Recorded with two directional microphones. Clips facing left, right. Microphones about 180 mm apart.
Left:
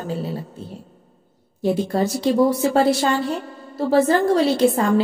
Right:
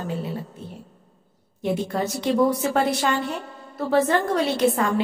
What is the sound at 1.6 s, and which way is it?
A woman's voice, 30° left (ahead or behind).